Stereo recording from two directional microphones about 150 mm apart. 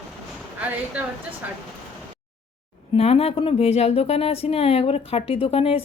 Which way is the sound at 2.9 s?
40° left (ahead or behind).